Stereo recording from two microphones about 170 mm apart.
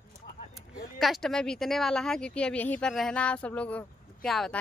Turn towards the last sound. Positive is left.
turn(degrees=0)  # may be behind; listen again after turning